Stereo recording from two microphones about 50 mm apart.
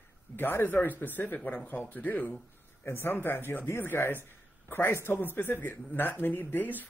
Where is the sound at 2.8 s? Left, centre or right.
Left.